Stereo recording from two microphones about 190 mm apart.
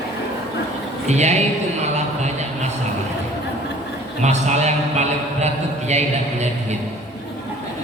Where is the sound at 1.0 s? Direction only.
35° right (ahead or behind).